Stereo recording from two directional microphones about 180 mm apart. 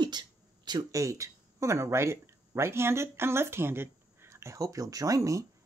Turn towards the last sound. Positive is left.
turn(degrees=-15)  # may be behind; listen again after turning